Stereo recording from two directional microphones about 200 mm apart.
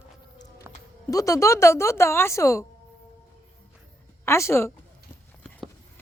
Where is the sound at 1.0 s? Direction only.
15° left (ahead or behind).